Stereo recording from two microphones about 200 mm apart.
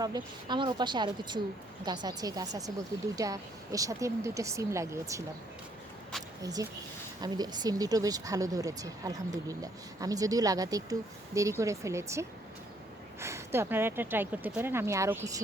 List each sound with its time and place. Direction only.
0.0 s a woman's voice: 20° right (ahead or behind)
6.4 s speech: 15° right (ahead or behind)